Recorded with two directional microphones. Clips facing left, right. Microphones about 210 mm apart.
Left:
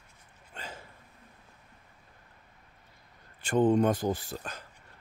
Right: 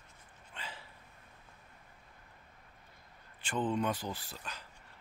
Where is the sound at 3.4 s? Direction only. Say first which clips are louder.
Left 9 dB; 45° left (ahead or behind).